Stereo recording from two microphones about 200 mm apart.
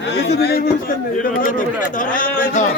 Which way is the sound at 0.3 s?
55° left (ahead or behind).